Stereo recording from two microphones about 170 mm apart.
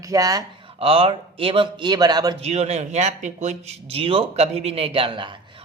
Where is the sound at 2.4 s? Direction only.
40° right (ahead or behind).